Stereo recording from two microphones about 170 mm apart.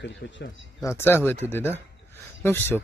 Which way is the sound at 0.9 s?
15° left (ahead or behind).